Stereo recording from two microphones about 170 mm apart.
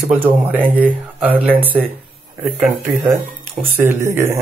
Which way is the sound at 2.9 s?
15° right (ahead or behind).